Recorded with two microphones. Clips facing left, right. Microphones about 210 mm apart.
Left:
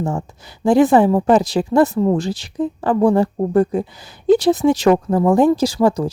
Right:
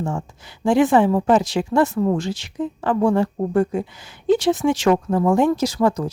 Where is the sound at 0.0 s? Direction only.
40° left (ahead or behind).